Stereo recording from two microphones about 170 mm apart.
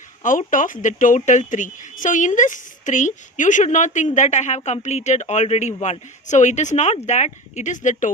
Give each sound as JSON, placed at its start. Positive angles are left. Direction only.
{"t": 0.2, "sound": "speech", "side_deg": 50}